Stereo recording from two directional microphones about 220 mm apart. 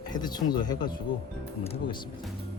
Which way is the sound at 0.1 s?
20° left (ahead or behind).